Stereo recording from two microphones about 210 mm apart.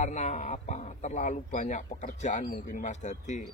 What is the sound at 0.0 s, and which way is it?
Speech, 35° left (ahead or behind).